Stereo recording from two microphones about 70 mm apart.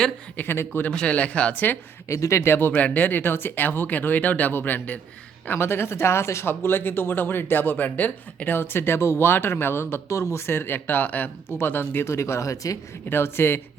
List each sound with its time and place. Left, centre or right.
0.3 s speech: left
0.9 s speech: centre
2.0 s speech: left
13.1 s speech: left